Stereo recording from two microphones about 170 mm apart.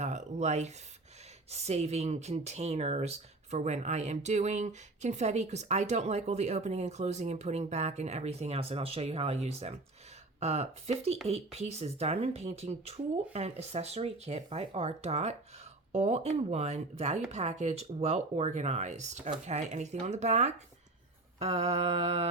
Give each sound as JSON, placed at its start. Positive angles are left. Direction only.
{"t": 0.0, "sound": "speech", "side_deg": -45}